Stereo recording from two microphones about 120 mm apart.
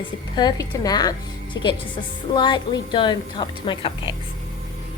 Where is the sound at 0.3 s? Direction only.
35° left (ahead or behind).